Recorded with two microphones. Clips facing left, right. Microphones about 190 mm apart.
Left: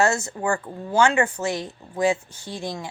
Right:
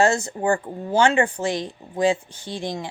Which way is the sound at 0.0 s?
30° right (ahead or behind).